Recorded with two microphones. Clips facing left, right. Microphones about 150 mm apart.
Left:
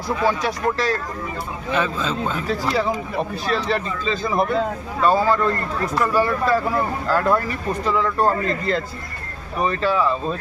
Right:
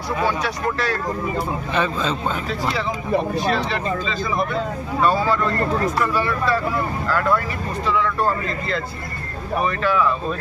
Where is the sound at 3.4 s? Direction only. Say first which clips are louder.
Right 2 dB; 35° right (ahead or behind).